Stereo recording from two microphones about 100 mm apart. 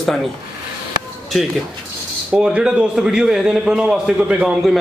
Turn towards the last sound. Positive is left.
turn(degrees=-5)  # may be behind; listen again after turning